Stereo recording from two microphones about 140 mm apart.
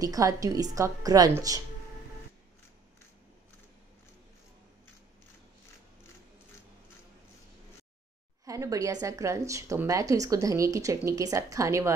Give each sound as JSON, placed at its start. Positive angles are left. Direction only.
{"t": 0.0, "sound": "speech", "side_deg": -25}
{"t": 8.5, "sound": "speech", "side_deg": -25}